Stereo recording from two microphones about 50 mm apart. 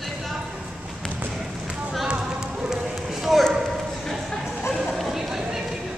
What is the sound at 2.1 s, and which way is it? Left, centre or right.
Run, centre.